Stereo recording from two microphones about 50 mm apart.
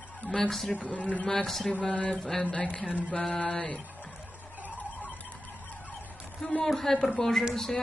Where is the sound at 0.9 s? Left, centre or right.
Left.